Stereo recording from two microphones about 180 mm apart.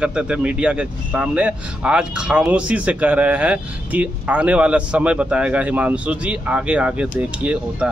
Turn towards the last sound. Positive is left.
turn(degrees=-5)  # may be behind; listen again after turning